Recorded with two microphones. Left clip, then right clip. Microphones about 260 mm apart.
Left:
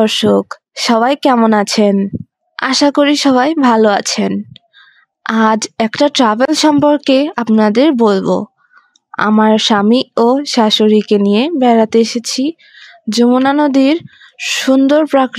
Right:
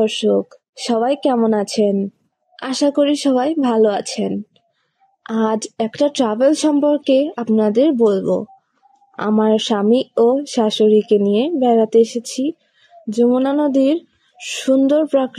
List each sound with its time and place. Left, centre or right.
0.0 s speech: left